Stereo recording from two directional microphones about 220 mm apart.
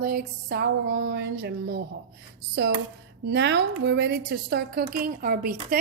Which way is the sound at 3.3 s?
50° right (ahead or behind).